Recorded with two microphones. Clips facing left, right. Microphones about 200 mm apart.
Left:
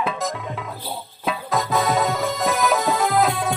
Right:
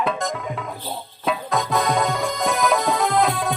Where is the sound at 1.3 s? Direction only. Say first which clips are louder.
Even; centre (ahead or behind).